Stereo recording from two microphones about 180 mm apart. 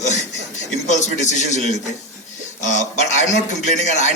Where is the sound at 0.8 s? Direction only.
40° left (ahead or behind).